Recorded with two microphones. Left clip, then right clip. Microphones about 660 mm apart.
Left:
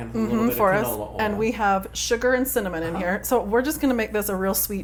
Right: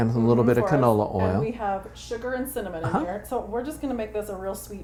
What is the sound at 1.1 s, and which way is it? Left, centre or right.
Speech, left.